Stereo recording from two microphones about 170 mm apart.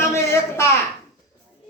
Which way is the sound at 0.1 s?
15° left (ahead or behind).